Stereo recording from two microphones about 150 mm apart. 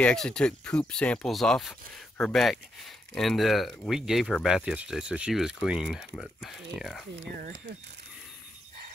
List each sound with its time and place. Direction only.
0.0 s speech: 5° left (ahead or behind)